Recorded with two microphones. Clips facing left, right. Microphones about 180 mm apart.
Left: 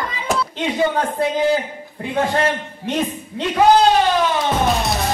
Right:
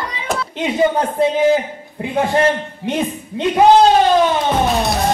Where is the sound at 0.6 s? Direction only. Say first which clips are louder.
Right 5 dB; 20° right (ahead or behind).